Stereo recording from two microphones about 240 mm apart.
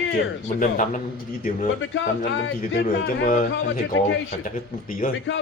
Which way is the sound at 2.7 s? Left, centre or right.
Left.